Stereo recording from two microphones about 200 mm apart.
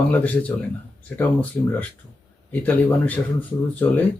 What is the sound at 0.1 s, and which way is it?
Speech, 10° left (ahead or behind).